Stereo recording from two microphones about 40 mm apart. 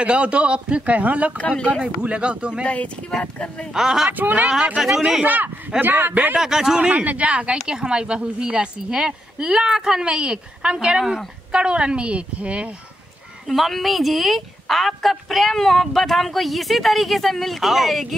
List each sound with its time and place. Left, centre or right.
0.0 s a woman's voice: right
0.8 s a woman's voice: right
2.6 s speech: left
3.7 s speech: centre
4.1 s a man's voice: right
4.7 s speech: centre
5.2 s a man's voice: right
6.3 s speech: centre
6.8 s a woman's voice: right
7.6 s a woman's voice: right
10.1 s a woman's voice: right
13.5 s speech: centre